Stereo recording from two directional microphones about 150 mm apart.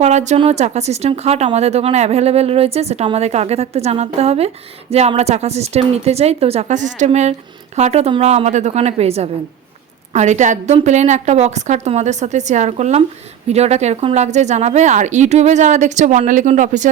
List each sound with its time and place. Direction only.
0.0 s speech: 50° right (ahead or behind)